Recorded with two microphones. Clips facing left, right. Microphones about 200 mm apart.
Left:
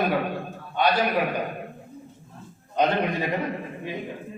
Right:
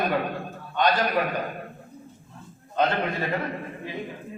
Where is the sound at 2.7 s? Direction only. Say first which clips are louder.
Left 2 dB; 15° left (ahead or behind).